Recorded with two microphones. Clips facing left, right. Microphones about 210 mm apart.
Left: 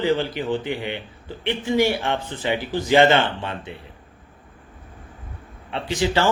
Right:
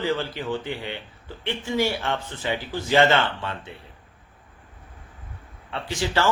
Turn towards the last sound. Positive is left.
turn(degrees=15)  # may be behind; listen again after turning